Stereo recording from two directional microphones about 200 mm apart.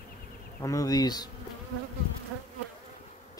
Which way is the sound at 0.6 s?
15° left (ahead or behind).